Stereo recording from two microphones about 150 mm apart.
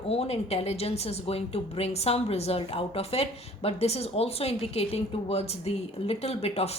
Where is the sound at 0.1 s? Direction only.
45° left (ahead or behind).